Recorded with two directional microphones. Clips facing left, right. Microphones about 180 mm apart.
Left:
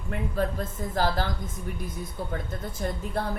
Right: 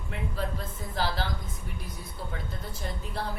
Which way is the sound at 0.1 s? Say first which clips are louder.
Left 6 dB; 50° left (ahead or behind).